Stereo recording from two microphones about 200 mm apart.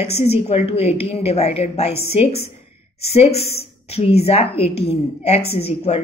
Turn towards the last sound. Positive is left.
turn(degrees=30)  # may be behind; listen again after turning